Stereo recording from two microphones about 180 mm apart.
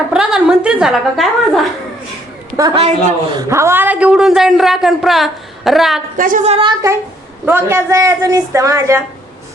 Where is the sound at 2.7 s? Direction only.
35° right (ahead or behind).